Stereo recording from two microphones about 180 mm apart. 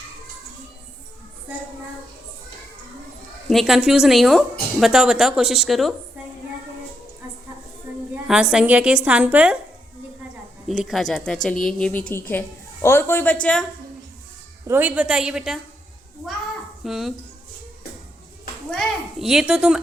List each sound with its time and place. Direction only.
3.5 s a child's voice: centre (ahead or behind)
8.1 s a woman's voice: 5° right (ahead or behind)
10.7 s a child's voice: centre (ahead or behind)
14.7 s a child's voice: 10° right (ahead or behind)
16.8 s a child's voice: centre (ahead or behind)
18.7 s a child's voice: 5° left (ahead or behind)